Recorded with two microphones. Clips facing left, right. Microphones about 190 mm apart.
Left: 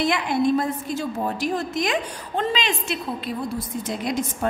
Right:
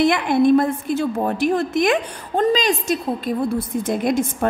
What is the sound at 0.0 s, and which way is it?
A woman's voice, 55° right (ahead or behind).